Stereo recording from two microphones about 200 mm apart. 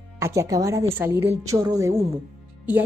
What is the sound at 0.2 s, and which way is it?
A woman's voice, 15° right (ahead or behind).